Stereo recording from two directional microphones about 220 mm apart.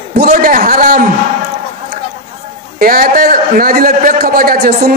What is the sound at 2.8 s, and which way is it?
A man's voice, 40° right (ahead or behind).